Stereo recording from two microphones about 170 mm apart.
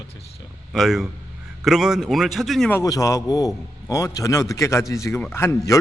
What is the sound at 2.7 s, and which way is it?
A man's voice, 20° left (ahead or behind).